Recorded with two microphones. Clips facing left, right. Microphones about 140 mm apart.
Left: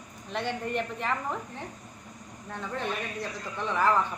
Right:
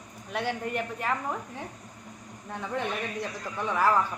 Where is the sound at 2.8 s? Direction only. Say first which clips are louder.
Right 2 dB; 10° right (ahead or behind).